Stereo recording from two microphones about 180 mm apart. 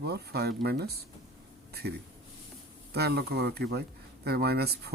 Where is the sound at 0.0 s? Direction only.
65° right (ahead or behind).